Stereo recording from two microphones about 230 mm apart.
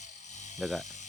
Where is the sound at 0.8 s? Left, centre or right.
Left.